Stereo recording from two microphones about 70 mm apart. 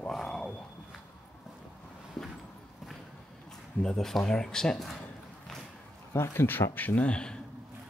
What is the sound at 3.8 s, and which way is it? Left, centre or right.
Speech, centre.